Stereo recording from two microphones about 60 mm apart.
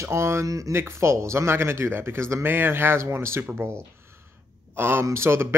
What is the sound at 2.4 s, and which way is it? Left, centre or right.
A man's voice, right.